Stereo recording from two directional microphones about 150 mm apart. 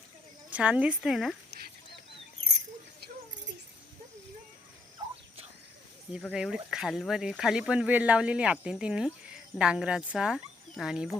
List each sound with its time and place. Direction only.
0.5 s speech: 10° right (ahead or behind)
1.5 s chicken: 90° right
6.3 s speech: 5° right (ahead or behind)